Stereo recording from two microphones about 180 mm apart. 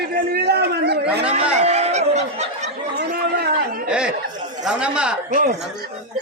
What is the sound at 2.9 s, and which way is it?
Chatter, 65° right (ahead or behind).